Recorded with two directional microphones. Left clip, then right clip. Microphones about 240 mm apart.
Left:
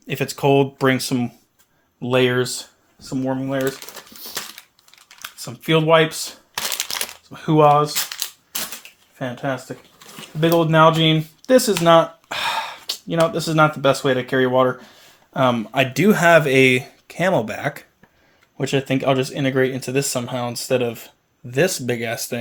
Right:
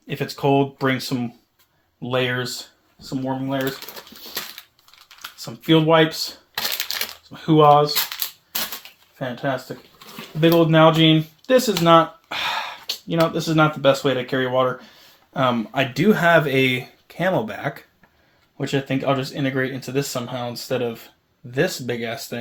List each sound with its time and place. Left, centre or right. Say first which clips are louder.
0.1 s speech: left 2 dB; left
3.1 s speech: left 2 dB; left
5.2 s speech: even; left
6.5 s crumpling: left 1 dB; centre
7.3 s speech: even; left
8.2 s crushing: left 1 dB; centre
9.2 s speech: even; left
10.4 s speech: even; left
11.8 s a sound: left 1 dB; left
13.2 s speech: left 2 dB; left